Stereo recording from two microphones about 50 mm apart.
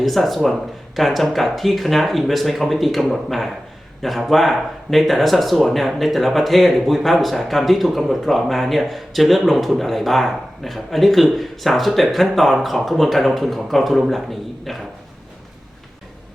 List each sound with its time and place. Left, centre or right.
0.0 s speech: centre